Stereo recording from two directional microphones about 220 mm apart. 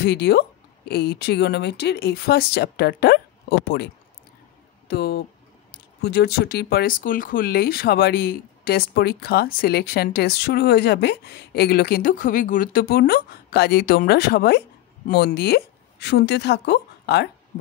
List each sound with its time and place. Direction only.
0.0 s speech: 50° left (ahead or behind)